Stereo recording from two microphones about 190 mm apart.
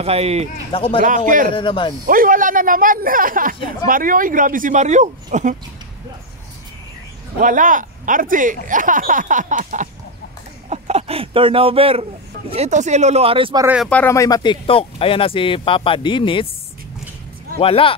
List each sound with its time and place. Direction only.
0.0 s speech: 35° right (ahead or behind)
0.7 s speech: 30° left (ahead or behind)
1.0 s speech: 45° right (ahead or behind)
1.5 s speech: 25° left (ahead or behind)
2.0 s speech: 45° right (ahead or behind)
7.3 s speech: 45° right (ahead or behind); by 13.7 s 25° right (ahead or behind)
13.8 s speech: 10° left (ahead or behind); by 16.4 s 25° left (ahead or behind)
17.6 s speech: 30° left (ahead or behind)